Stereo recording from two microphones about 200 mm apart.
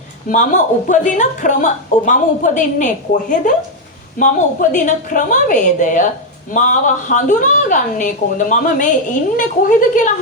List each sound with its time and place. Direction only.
0.3 s a woman's voice: 40° left (ahead or behind)